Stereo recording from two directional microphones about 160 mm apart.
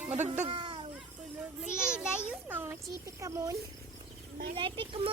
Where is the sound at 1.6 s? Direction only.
5° right (ahead or behind).